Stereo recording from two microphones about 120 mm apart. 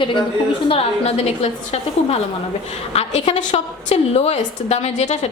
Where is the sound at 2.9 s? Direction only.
70° left (ahead or behind).